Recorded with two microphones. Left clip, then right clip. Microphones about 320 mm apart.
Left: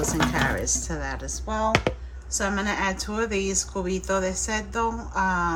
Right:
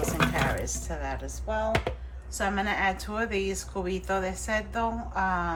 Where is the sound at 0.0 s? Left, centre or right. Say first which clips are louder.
Left 3 dB; centre.